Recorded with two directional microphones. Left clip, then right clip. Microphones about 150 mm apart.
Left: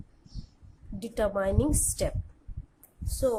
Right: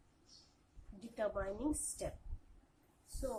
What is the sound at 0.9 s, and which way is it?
Speech, 60° left (ahead or behind).